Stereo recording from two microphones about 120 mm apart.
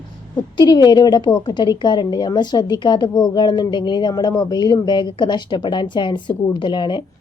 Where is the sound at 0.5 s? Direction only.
35° left (ahead or behind).